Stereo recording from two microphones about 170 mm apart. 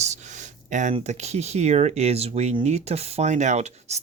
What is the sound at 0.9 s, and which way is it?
Speech, 40° right (ahead or behind).